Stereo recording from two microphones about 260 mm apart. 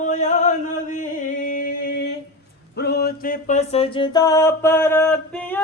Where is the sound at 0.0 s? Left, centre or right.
Left.